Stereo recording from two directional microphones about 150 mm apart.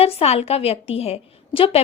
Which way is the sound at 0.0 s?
45° left (ahead or behind).